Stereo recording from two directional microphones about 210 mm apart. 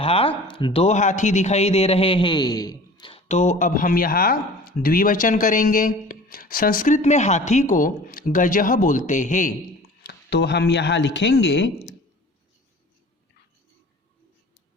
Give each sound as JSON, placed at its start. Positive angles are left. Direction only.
{"t": 0.0, "sound": "speech", "side_deg": 25}
{"t": 10.1, "sound": "speech", "side_deg": 55}